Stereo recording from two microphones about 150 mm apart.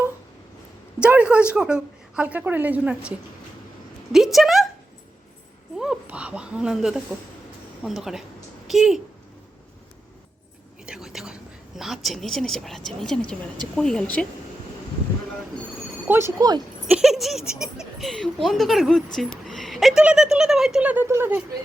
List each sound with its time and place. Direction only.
0.9 s speech: 10° right (ahead or behind)
5.7 s a woman's voice: 5° right (ahead or behind)
10.8 s whispering: 5° right (ahead or behind)
11.8 s speech: centre (ahead or behind)
16.0 s speech: 15° right (ahead or behind)
16.8 s a sound: centre (ahead or behind)
17.5 s speech: 5° right (ahead or behind)